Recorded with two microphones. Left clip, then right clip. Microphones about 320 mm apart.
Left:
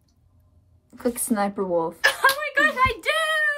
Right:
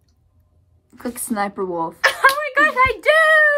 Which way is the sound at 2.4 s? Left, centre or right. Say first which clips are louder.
Right 5 dB; centre.